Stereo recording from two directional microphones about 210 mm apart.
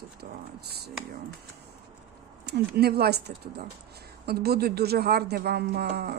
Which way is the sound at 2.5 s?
50° right (ahead or behind).